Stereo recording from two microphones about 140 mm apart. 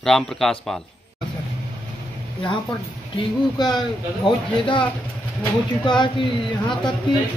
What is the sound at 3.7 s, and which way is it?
A man's voice, 35° left (ahead or behind).